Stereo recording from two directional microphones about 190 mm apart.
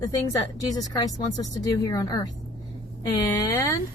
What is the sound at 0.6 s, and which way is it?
Speech, 20° left (ahead or behind).